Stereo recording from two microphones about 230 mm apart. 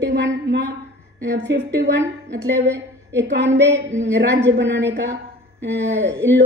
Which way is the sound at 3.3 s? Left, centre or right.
Right.